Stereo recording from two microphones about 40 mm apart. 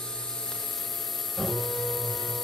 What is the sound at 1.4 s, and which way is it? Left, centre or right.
Mains hum, centre.